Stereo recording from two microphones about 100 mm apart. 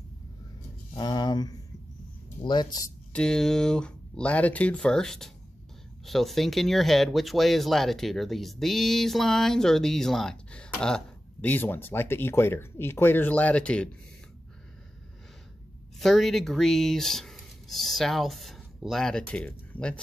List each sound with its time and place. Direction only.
0.9 s speech: 45° left (ahead or behind)
3.1 s speech: 5° left (ahead or behind)
16.0 s speech: centre (ahead or behind)